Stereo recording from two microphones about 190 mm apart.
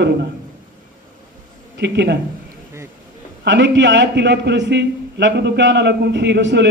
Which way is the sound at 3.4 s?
65° right (ahead or behind).